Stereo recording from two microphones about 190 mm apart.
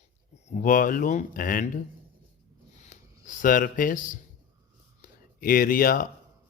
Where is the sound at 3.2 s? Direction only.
45° left (ahead or behind).